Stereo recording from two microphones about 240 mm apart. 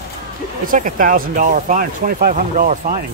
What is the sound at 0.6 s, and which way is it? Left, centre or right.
Speech, right.